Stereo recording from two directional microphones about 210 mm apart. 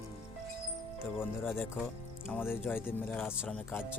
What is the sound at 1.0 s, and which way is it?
Speech, 10° left (ahead or behind).